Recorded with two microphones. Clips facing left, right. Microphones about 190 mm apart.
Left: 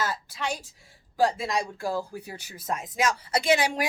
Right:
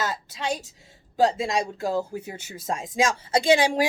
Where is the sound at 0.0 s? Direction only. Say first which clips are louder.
Right 1 dB; 20° right (ahead or behind).